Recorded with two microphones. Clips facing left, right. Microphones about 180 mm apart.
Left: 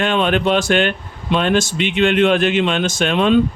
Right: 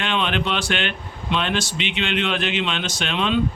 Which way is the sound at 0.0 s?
45° left (ahead or behind).